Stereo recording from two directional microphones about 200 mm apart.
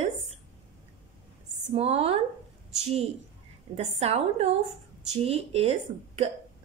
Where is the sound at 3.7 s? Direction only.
30° right (ahead or behind).